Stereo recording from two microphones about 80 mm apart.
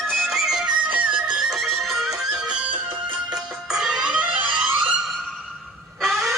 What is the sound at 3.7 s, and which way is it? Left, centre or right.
Music, centre.